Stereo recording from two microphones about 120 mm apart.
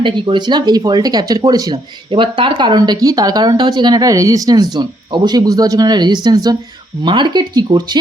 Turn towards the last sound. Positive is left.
turn(degrees=-35)  # may be behind; listen again after turning